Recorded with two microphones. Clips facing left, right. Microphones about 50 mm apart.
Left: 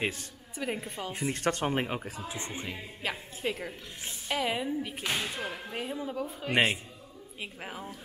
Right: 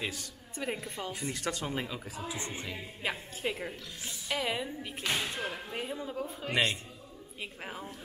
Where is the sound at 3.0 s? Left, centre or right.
Centre.